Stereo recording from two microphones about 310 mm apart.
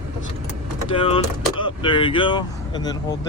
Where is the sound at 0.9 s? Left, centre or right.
Centre.